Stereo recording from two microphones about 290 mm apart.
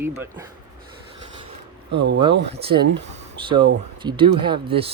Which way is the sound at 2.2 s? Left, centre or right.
Centre.